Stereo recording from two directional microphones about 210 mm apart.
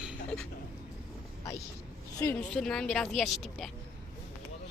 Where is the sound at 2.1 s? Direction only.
15° left (ahead or behind).